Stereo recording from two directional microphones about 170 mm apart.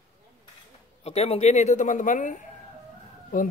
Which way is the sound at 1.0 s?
35° left (ahead or behind).